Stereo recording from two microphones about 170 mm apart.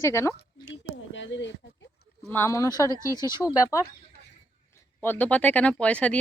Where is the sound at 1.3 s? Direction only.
90° left.